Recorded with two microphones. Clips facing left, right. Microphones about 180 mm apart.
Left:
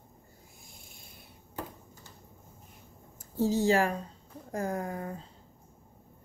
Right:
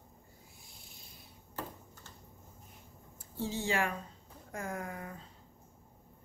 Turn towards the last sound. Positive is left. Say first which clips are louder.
# left 6 dB
turn(degrees=35)  # may be behind; listen again after turning